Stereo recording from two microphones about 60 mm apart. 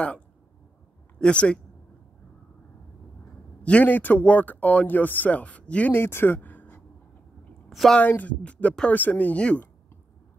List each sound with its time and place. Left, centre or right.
1.2 s speech: centre
3.6 s speech: left
5.9 s speech: left
8.0 s speech: left